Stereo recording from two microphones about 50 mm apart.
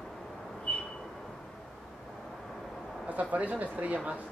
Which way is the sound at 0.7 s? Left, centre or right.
Left.